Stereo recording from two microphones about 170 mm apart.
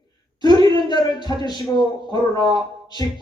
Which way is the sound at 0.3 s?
25° left (ahead or behind).